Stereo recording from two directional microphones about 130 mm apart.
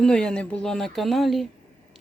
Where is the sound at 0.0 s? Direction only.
5° left (ahead or behind).